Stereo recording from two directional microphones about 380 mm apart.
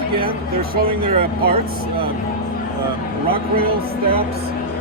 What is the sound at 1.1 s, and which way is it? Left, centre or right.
Speech, right.